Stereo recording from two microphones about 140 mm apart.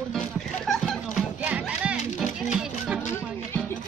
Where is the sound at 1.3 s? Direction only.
10° right (ahead or behind).